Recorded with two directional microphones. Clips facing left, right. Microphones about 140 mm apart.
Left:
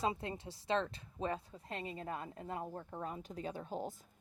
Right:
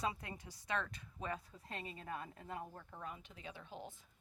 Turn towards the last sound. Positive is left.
turn(degrees=40)  # may be behind; listen again after turning